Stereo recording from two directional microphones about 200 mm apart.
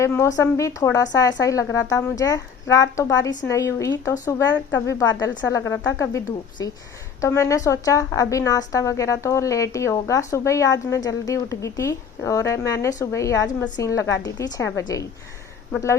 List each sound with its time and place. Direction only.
0.0 s a woman's voice: 15° left (ahead or behind)